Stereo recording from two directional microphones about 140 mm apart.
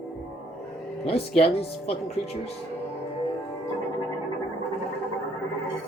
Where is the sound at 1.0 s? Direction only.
45° left (ahead or behind).